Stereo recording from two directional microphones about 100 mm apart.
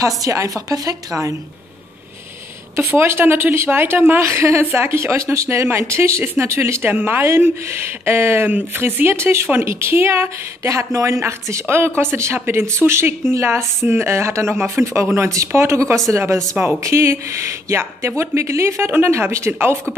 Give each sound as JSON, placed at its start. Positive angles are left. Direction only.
{"t": 0.0, "sound": "a woman's voice", "side_deg": -35}
{"t": 2.7, "sound": "a woman's voice", "side_deg": -25}